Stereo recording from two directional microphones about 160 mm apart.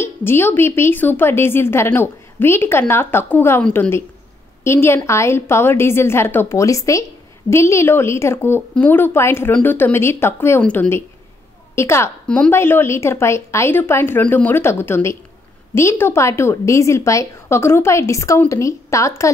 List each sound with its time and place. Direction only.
0.0 s a woman's voice: 15° left (ahead or behind)